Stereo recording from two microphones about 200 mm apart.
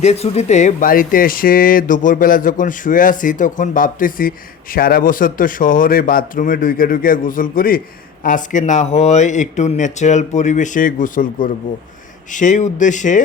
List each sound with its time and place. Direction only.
0.0 s speech: 30° left (ahead or behind)